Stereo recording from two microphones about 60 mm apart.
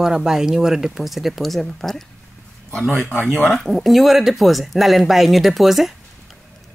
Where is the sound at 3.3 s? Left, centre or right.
Centre.